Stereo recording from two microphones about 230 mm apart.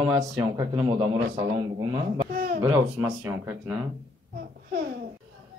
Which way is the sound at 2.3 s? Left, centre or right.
Right.